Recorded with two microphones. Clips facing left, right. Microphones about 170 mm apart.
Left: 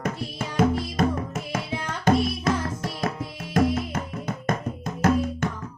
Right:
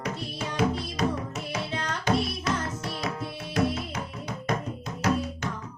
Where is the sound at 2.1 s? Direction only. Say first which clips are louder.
Left 5 dB; 50° left (ahead or behind).